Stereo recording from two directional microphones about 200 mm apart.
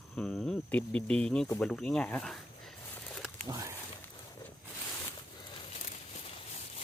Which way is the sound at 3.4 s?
20° right (ahead or behind).